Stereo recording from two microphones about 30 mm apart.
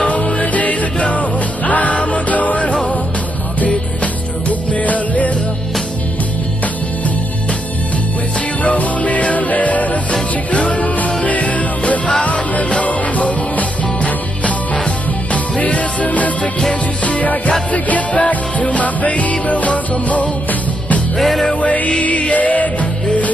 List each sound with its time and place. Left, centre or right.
0.4 s music: left
3.6 s music: left
8.6 s music: left
10.5 s music: left
21.2 s music: centre
21.5 s music: left